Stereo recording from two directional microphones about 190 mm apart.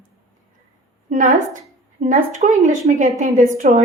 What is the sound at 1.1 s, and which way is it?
A woman's voice, 40° right (ahead or behind).